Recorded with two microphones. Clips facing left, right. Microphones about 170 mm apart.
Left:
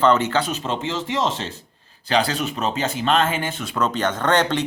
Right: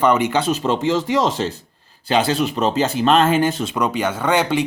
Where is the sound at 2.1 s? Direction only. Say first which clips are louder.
Right 3 dB; 25° right (ahead or behind).